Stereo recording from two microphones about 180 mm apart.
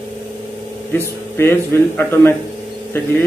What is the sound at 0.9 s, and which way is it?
Speech, 15° left (ahead or behind).